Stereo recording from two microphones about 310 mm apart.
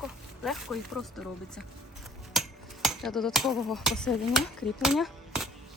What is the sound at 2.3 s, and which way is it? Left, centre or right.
Speech, centre.